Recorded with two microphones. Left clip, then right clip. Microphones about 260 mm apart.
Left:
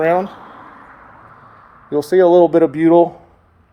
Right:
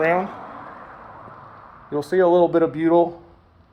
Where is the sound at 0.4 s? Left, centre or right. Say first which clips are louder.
Right 1 dB; right.